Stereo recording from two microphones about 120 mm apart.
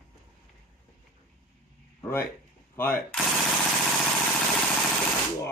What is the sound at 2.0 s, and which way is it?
Speech, 20° left (ahead or behind).